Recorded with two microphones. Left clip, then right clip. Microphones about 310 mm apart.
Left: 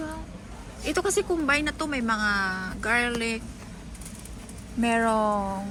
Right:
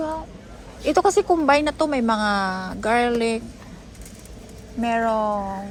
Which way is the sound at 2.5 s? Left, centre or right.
Centre.